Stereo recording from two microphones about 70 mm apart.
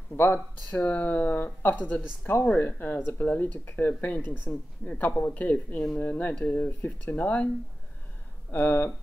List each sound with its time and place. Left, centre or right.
0.1 s speech: left
8.5 s speech: left